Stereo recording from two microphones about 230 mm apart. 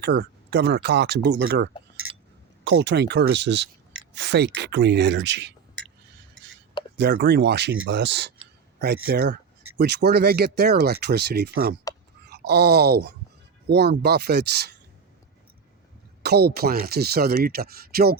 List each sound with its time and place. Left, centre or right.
0.0 s speech: right
6.9 s speech: right
16.2 s speech: right